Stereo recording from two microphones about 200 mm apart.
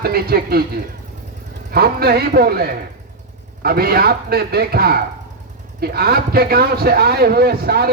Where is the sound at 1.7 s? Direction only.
50° right (ahead or behind).